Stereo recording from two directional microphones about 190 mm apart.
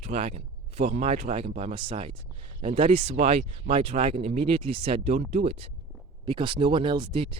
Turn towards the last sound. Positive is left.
turn(degrees=-25)  # may be behind; listen again after turning